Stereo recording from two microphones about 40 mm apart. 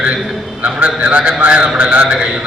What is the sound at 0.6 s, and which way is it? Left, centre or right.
A man's voice, right.